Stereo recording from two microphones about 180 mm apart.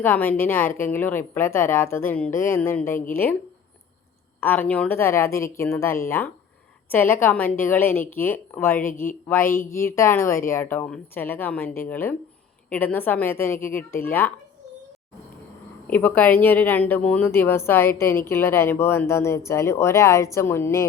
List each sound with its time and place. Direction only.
0.0 s speech: 10° left (ahead or behind)
4.4 s speech: 10° left (ahead or behind)
15.9 s speech: 10° left (ahead or behind)